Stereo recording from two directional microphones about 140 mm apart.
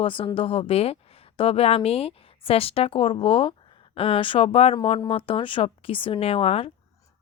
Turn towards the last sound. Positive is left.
turn(degrees=45)  # may be behind; listen again after turning